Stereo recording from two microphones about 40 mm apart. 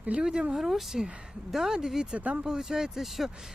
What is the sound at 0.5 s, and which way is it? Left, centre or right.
Speech, centre.